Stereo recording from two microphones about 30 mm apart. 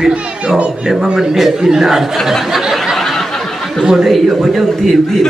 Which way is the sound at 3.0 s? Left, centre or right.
Centre.